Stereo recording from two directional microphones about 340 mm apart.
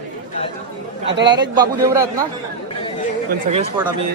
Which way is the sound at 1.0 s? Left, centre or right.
Right.